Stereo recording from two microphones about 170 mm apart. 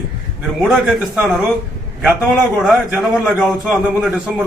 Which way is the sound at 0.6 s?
5° right (ahead or behind).